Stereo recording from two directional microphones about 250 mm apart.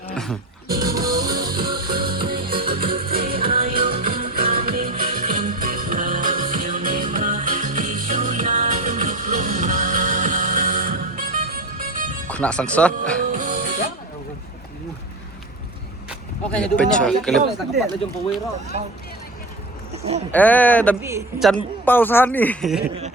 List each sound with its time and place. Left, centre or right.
0.1 s music: centre
0.7 s music: centre
1.5 s music: right
2.5 s music: right
3.1 s music: right
12.3 s speech: centre
13.3 s music: right
16.0 s a man's voice: centre
19.9 s a sound: right
20.3 s speech: centre
21.0 s a woman's voice: centre
21.4 s speech: centre